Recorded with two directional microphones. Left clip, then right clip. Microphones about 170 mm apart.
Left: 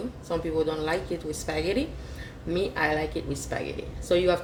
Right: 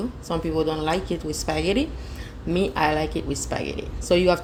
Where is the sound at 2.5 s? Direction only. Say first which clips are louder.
Right 4 dB; 40° right (ahead or behind).